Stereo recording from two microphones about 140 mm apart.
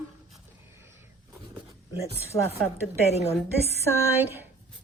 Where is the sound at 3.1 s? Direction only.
50° left (ahead or behind).